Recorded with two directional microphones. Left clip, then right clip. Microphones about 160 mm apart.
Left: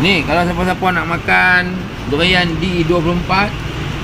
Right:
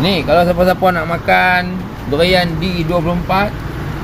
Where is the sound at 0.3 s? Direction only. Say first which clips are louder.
Right 4 dB; 65° right (ahead or behind).